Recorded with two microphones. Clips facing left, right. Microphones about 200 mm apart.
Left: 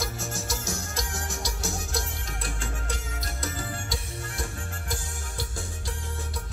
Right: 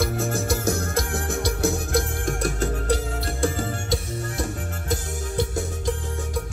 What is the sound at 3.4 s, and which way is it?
Music, 50° right (ahead or behind).